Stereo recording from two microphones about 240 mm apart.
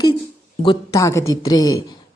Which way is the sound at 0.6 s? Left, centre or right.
Centre.